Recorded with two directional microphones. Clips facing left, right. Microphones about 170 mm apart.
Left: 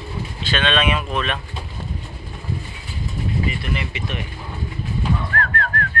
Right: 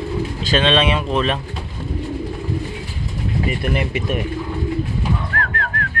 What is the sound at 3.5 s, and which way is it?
Speech, 50° right (ahead or behind).